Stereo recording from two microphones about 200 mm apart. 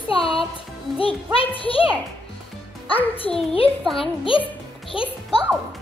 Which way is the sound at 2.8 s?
25° left (ahead or behind).